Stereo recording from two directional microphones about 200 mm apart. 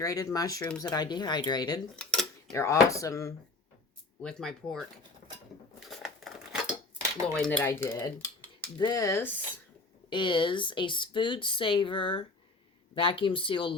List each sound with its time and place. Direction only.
0.0 s speech: 15° left (ahead or behind)
2.0 s cutlery: 5° left (ahead or behind)
2.5 s speech: 15° left (ahead or behind)
4.2 s speech: 5° left (ahead or behind)
5.9 s scissors: centre (ahead or behind)
7.3 s speech: 5° left (ahead or behind)
10.1 s speech: 25° left (ahead or behind)